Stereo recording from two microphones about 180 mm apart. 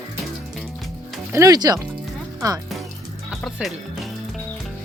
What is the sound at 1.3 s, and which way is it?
Music, 20° right (ahead or behind).